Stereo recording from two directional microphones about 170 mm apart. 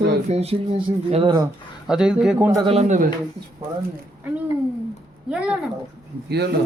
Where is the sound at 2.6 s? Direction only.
35° right (ahead or behind).